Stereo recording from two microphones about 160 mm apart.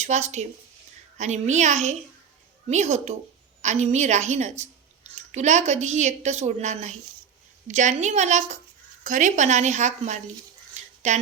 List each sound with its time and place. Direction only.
0.0 s a woman's voice: 45° right (ahead or behind)